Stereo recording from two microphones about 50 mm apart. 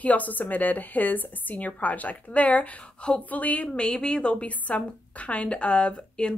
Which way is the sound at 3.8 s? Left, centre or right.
Centre.